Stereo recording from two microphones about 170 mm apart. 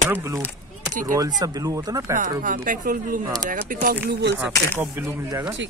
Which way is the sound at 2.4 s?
55° right (ahead or behind).